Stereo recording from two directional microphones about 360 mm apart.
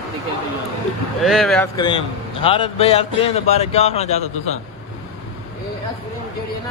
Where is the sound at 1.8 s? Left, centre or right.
Centre.